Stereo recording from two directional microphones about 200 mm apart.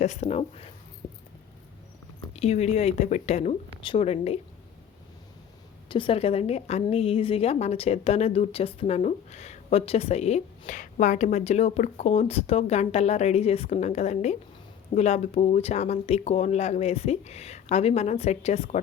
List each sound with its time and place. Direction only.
0.0 s a woman's voice: 35° left (ahead or behind)
2.3 s a woman's voice: 30° left (ahead or behind)
5.9 s a woman's voice: 25° left (ahead or behind)